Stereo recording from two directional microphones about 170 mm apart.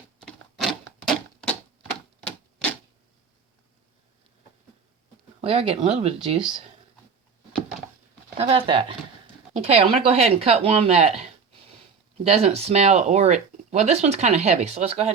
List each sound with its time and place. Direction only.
0.2 s a sound: centre (ahead or behind)
5.4 s speech: 35° right (ahead or behind)
8.4 s speech: 35° right (ahead or behind)
12.2 s speech: 35° right (ahead or behind)